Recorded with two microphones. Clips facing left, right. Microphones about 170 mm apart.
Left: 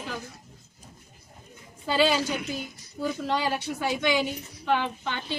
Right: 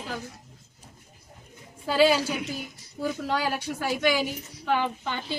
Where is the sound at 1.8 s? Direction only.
10° right (ahead or behind).